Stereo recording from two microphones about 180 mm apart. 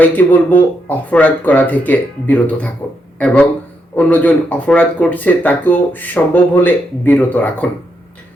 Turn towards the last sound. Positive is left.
turn(degrees=10)  # may be behind; listen again after turning